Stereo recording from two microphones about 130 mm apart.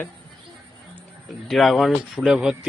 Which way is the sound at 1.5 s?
Centre (ahead or behind).